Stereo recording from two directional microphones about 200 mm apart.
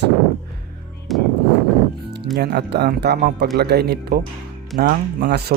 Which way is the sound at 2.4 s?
55° right (ahead or behind).